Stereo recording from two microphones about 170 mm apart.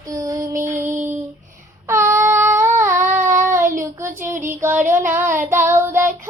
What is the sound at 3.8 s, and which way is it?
Child singing, 15° right (ahead or behind).